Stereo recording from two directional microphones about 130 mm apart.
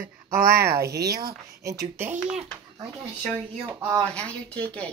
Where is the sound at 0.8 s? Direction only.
25° right (ahead or behind).